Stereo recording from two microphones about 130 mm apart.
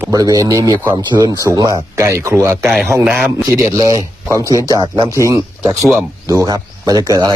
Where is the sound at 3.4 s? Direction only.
25° right (ahead or behind).